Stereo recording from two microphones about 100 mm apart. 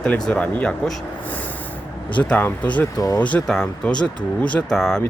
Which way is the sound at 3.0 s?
40° left (ahead or behind).